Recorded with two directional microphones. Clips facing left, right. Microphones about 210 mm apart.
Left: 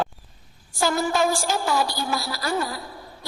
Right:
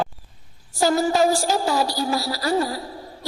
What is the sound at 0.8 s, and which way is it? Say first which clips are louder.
Music: right 4 dB; 35° right (ahead or behind).